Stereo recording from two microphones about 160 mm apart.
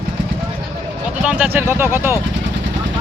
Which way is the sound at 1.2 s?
10° right (ahead or behind).